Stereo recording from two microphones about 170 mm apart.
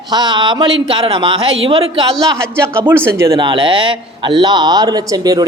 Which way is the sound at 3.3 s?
30° right (ahead or behind).